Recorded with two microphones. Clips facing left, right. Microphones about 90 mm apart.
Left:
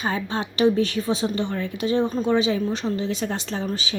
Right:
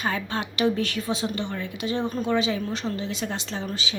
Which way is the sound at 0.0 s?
30° left (ahead or behind).